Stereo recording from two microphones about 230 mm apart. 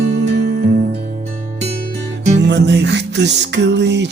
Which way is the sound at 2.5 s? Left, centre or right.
Right.